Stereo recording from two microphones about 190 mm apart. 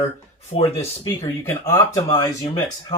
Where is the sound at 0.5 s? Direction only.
30° left (ahead or behind).